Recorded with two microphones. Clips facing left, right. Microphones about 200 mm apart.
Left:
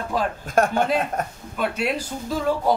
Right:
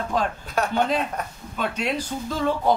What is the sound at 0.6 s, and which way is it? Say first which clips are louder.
Speech: left 6 dB; 50° left (ahead or behind).